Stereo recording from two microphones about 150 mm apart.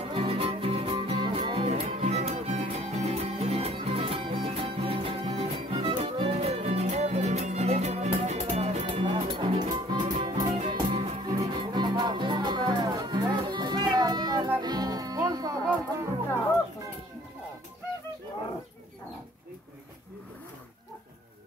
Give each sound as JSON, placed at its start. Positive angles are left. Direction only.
{"t": 0.1, "sound": "music", "side_deg": -40}
{"t": 8.8, "sound": "music", "side_deg": -35}